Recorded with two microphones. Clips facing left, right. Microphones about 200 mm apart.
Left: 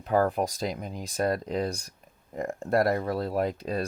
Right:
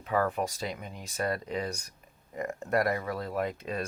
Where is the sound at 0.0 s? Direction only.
35° left (ahead or behind).